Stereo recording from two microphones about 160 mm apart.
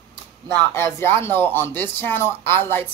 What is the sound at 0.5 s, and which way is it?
Speech, 15° left (ahead or behind).